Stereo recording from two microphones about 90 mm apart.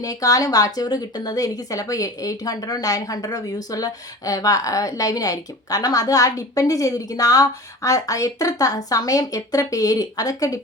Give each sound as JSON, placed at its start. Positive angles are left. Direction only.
{"t": 0.0, "sound": "a woman's voice", "side_deg": 40}